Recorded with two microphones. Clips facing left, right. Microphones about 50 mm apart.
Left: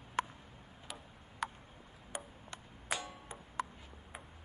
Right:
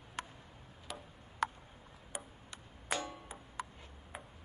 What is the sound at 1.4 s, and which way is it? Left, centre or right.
Tick, centre.